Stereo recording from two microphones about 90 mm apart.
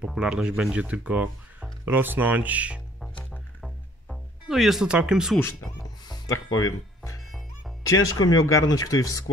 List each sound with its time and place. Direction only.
0.0 s speech: 10° right (ahead or behind)
3.6 s music: centre (ahead or behind)
7.2 s music: centre (ahead or behind)
7.8 s speech: 45° left (ahead or behind)